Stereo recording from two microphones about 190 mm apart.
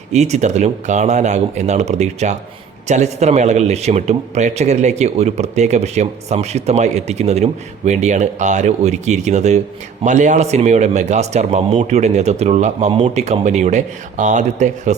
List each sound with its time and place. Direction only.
0.1 s speech: 35° right (ahead or behind)